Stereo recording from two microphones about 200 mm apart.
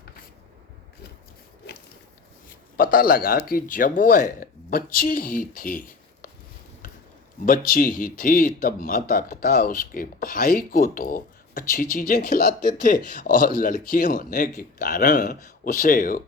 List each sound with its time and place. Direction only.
2.7 s speech: 45° left (ahead or behind)
7.4 s speech: 45° left (ahead or behind)